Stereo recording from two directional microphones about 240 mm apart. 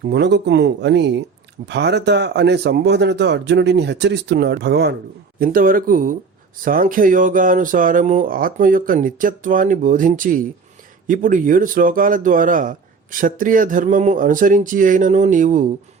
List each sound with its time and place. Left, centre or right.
0.0 s speech: right